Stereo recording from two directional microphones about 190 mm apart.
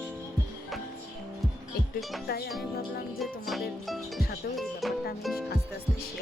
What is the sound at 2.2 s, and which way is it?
Speech, 55° left (ahead or behind).